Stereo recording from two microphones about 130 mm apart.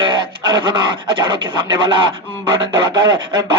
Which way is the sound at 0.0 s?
35° right (ahead or behind).